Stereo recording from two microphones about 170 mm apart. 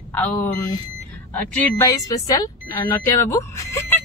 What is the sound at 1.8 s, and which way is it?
Speech, 20° left (ahead or behind).